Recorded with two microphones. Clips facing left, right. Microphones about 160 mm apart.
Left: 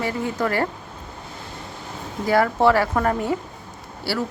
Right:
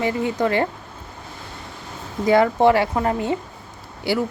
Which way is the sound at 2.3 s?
20° right (ahead or behind).